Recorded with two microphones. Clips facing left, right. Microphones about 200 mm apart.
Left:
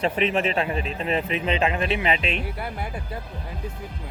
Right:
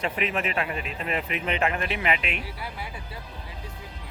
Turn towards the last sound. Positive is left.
turn(degrees=50)  # may be behind; listen again after turning